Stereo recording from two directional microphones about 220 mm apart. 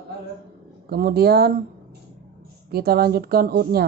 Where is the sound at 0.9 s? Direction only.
45° right (ahead or behind).